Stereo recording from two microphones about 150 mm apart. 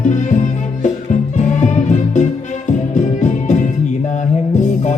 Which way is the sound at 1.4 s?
50° left (ahead or behind).